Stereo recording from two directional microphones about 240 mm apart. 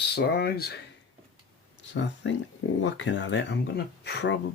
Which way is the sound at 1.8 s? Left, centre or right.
Left.